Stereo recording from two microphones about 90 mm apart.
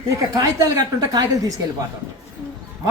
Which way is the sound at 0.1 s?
40° right (ahead or behind).